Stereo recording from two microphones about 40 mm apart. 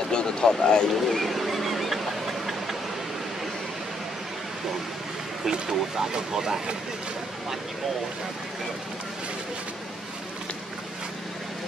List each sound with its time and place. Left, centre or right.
0.1 s speech: left
0.9 s a sound: centre
5.4 s speech: centre